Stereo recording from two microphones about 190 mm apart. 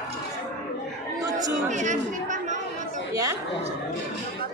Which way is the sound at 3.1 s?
20° right (ahead or behind).